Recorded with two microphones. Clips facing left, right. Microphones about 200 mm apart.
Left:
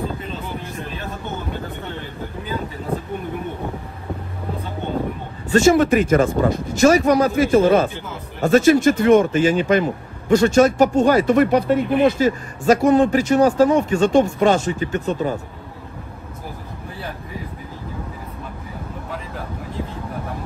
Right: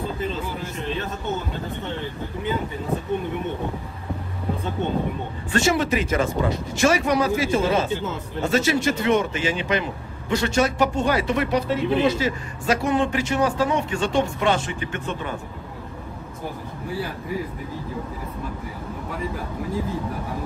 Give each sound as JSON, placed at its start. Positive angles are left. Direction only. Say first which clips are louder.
{"t": 5.5, "sound": "speech", "louder": "left 7 dB", "side_deg": 45}